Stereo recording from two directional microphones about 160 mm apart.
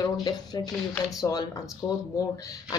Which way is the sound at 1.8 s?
30° left (ahead or behind).